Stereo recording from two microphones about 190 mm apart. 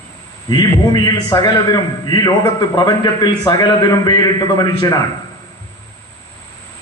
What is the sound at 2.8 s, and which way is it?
A man's voice, 20° left (ahead or behind).